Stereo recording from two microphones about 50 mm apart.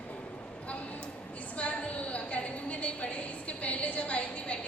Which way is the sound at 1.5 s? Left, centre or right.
Left.